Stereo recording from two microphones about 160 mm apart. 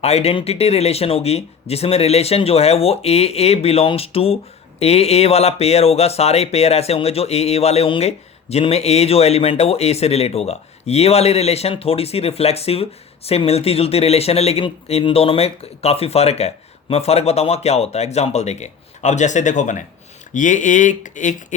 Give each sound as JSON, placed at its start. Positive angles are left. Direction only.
{"t": 0.0, "sound": "speech", "side_deg": 40}